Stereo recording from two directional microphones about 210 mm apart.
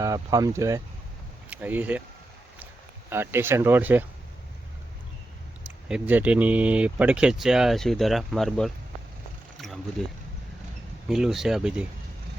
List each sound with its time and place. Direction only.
0.0 s speech: 15° right (ahead or behind)
3.1 s speech: 10° right (ahead or behind)
5.9 s speech: 5° right (ahead or behind)
9.6 s a sound: centre (ahead or behind)
11.1 s speech: centre (ahead or behind)